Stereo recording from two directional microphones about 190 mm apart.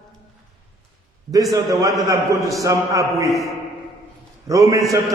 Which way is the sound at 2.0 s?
15° right (ahead or behind).